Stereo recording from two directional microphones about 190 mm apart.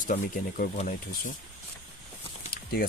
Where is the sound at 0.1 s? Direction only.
45° left (ahead or behind).